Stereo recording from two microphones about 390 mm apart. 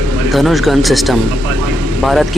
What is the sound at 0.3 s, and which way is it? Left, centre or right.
Speech, centre.